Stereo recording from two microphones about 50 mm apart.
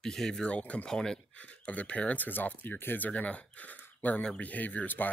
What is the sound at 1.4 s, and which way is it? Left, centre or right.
Speech, left.